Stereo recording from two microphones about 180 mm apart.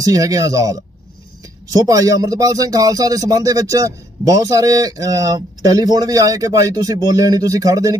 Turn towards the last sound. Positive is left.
turn(degrees=-20)  # may be behind; listen again after turning